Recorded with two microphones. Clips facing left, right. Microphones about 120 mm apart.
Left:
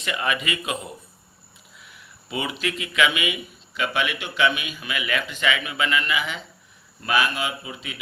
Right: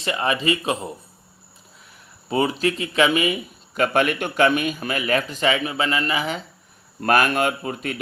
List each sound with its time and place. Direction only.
0.0 s speech: 30° right (ahead or behind)
2.3 s speech: 40° right (ahead or behind)
7.0 s speech: 50° right (ahead or behind)